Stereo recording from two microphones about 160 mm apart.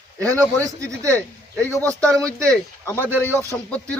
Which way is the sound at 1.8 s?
20° right (ahead or behind).